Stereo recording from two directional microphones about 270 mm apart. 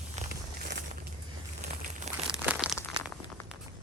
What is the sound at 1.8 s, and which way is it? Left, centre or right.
Crumpling, right.